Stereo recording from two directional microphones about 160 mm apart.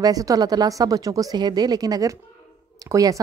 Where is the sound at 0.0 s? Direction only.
20° right (ahead or behind).